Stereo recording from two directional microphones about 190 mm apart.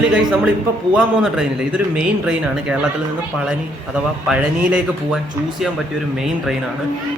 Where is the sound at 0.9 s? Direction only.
5° right (ahead or behind).